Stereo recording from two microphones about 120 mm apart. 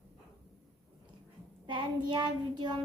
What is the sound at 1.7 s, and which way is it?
Child singing, 40° right (ahead or behind).